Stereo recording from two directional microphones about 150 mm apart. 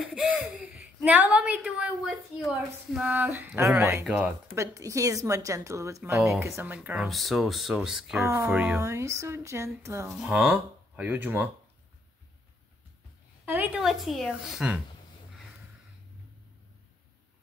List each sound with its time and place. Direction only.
0.1 s speech: 5° right (ahead or behind)
4.6 s speech: 20° right (ahead or behind)
7.1 s speech: centre (ahead or behind)
8.2 s speech: 15° right (ahead or behind)
8.5 s speech: 5° right (ahead or behind)
8.7 s speech: 20° right (ahead or behind)
13.5 s speech: 10° right (ahead or behind)
13.8 s speech: centre (ahead or behind)